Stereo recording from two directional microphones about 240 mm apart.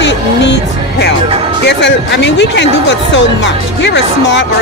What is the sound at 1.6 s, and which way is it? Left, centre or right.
Speech, left.